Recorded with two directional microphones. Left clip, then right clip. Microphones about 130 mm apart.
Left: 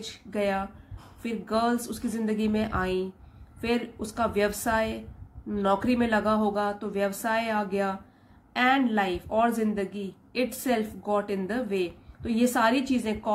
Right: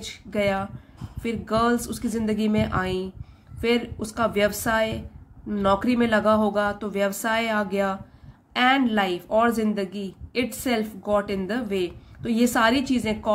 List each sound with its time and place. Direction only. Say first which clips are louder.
0.0 s a woman's voice: right 4 dB; 25° right (ahead or behind)